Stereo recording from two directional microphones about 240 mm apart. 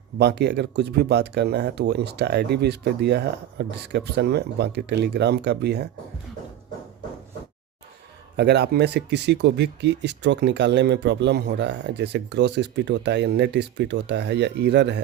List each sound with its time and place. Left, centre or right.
0.2 s speech: right
8.4 s speech: right